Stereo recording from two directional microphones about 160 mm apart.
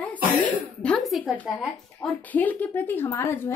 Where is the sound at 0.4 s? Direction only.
5° left (ahead or behind).